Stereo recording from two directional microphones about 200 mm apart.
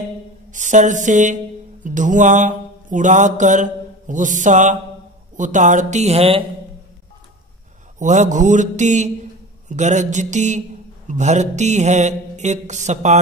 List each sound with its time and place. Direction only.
0.5 s a sound: 40° right (ahead or behind)
5.4 s mantra: 40° right (ahead or behind)
8.0 s mantra: 40° right (ahead or behind)